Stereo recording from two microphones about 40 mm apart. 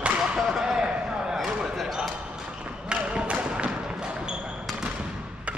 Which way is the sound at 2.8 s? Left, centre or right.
Right.